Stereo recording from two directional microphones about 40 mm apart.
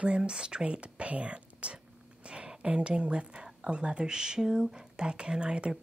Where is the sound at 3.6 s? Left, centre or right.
Right.